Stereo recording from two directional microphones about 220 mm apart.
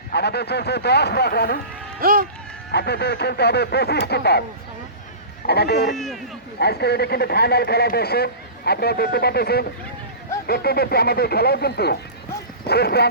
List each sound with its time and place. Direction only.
0.1 s speech: 50° left (ahead or behind)
2.0 s speech: 40° right (ahead or behind)
2.7 s speech: 50° left (ahead or behind)
5.5 s speech: 45° left (ahead or behind)
5.9 s speech: centre (ahead or behind)
6.6 s speech: 45° left (ahead or behind)